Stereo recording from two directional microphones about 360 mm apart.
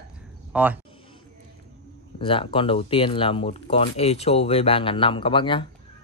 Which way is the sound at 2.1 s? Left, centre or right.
Centre.